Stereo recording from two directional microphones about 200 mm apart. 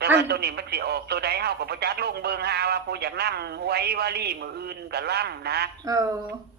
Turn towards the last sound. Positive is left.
turn(degrees=-15)  # may be behind; listen again after turning